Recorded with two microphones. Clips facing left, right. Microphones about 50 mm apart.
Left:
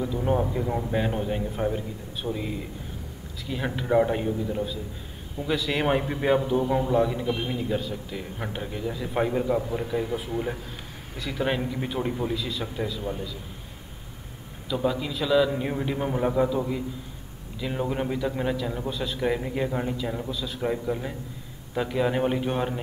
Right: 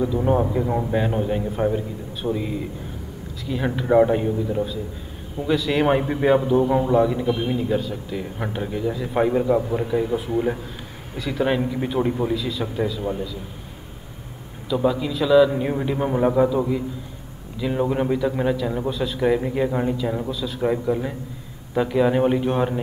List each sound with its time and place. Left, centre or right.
0.0 s a man's voice: centre
3.4 s a man's voice: centre
3.8 s a man's voice: centre
5.5 s a man's voice: centre
10.3 s a man's voice: centre
11.1 s a man's voice: centre
12.4 s a man's voice: centre
14.9 s a man's voice: centre